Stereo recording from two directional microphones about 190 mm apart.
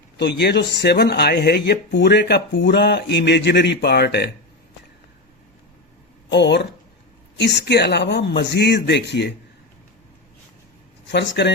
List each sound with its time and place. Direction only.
0.2 s speech: 60° left (ahead or behind)
6.3 s speech: 65° left (ahead or behind)
11.1 s speech: 65° left (ahead or behind)